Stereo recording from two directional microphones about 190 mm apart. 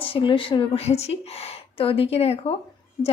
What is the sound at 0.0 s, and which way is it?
A woman's voice, 30° left (ahead or behind).